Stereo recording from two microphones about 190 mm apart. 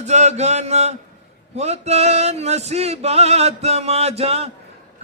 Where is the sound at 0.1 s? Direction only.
35° right (ahead or behind).